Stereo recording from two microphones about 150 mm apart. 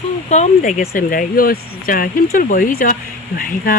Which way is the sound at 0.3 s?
50° left (ahead or behind).